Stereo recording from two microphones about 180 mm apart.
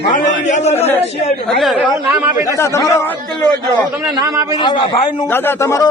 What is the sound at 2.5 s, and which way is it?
Speech, 15° left (ahead or behind).